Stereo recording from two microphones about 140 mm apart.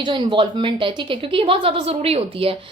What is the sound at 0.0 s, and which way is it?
A woman's voice, 35° right (ahead or behind).